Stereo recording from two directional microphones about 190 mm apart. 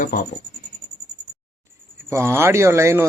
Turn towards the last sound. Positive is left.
turn(degrees=-15)  # may be behind; listen again after turning